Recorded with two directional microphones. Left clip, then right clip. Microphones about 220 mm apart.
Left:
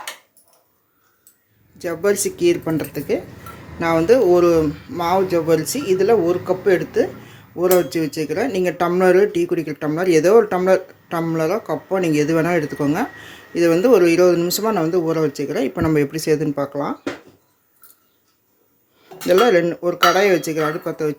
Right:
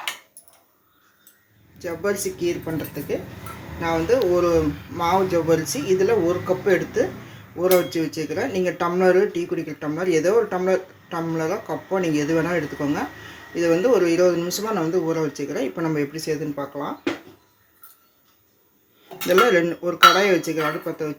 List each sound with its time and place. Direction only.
1.8 s speech: 35° left (ahead or behind)
16.6 s speech: 65° left (ahead or behind)
19.3 s speech: 25° left (ahead or behind)